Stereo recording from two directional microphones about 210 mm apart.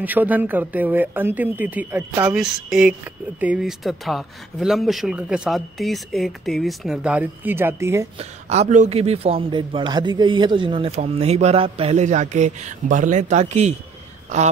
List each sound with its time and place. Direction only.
0.0 s speech: 10° right (ahead or behind)
8.2 s a man's voice: 30° right (ahead or behind)